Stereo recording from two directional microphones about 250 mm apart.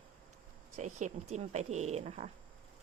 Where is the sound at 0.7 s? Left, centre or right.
Right.